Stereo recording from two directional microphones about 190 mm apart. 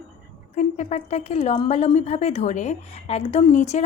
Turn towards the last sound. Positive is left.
turn(degrees=35)  # may be behind; listen again after turning